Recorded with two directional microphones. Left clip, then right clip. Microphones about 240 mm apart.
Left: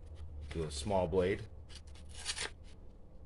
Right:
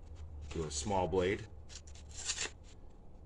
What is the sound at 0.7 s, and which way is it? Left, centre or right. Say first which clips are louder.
Speech: left 1 dB; centre.